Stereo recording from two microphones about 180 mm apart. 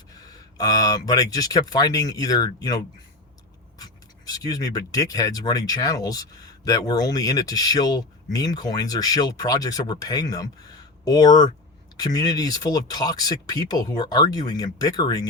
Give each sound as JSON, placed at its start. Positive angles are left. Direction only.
{"t": 0.3, "sound": "speech", "side_deg": 20}
{"t": 4.3, "sound": "speech", "side_deg": 20}